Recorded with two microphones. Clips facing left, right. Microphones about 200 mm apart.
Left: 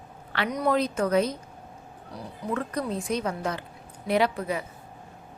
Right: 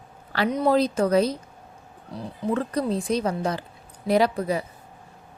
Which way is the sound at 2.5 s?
35° right (ahead or behind).